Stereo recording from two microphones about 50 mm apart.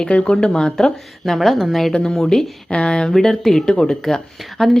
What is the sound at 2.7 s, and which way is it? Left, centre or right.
Speech, left.